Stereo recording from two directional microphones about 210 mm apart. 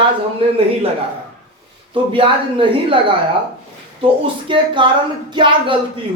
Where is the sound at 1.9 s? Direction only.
25° right (ahead or behind).